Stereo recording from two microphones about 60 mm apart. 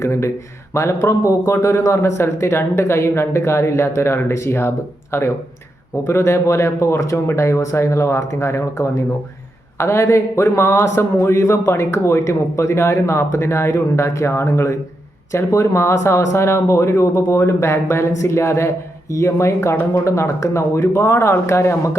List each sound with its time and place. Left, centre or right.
0.0 s speech: left
2.0 s speech: left
19.9 s speech: left